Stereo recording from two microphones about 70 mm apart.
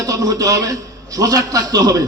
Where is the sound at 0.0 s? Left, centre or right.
Right.